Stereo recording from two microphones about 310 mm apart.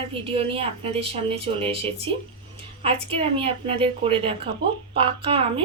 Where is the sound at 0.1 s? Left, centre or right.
Centre.